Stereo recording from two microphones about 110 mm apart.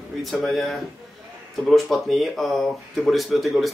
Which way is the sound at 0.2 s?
Centre (ahead or behind).